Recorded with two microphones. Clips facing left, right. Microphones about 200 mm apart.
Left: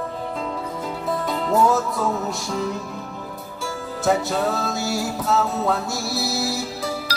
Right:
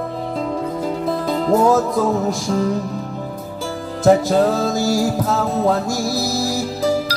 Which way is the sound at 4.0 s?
40° right (ahead or behind).